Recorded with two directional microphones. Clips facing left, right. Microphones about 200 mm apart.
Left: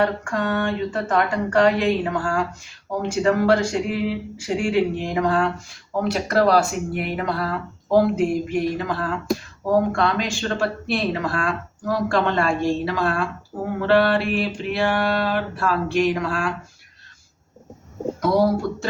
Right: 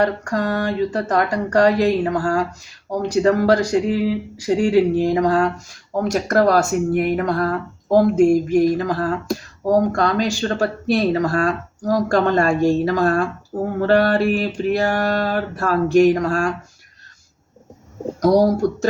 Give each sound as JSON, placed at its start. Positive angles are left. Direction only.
{"t": 0.0, "sound": "speech", "side_deg": -40}
{"t": 18.2, "sound": "speech", "side_deg": -40}